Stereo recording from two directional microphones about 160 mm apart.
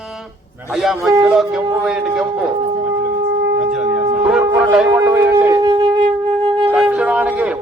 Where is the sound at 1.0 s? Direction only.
20° right (ahead or behind).